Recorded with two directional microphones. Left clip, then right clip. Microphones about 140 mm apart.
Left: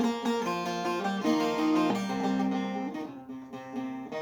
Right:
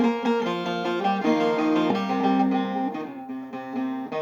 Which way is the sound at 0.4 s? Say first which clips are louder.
Right 4 dB; 5° right (ahead or behind).